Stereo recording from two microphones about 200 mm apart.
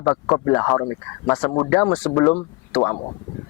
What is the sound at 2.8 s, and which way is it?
Speech, 25° left (ahead or behind).